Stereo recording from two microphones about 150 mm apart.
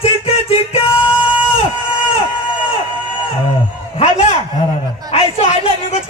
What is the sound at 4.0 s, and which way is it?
Speech, 50° left (ahead or behind).